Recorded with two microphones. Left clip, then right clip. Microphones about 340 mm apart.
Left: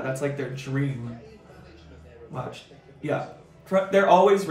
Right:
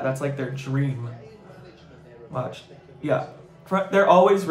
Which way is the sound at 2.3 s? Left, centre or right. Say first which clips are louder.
Right 5 dB; centre.